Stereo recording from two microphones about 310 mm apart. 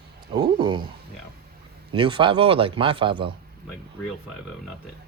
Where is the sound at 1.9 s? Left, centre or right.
Centre.